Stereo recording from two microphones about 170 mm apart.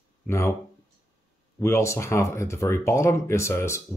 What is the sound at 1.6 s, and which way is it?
Speech, 15° left (ahead or behind).